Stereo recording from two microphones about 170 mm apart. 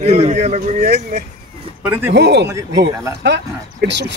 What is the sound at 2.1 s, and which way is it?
Speech, 90° right.